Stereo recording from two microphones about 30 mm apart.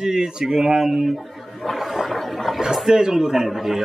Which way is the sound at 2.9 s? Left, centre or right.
Centre.